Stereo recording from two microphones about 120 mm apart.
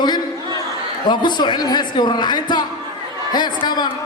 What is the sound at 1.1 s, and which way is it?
Speech, 40° left (ahead or behind).